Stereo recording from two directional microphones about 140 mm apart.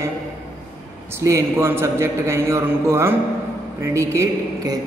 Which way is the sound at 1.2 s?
20° right (ahead or behind).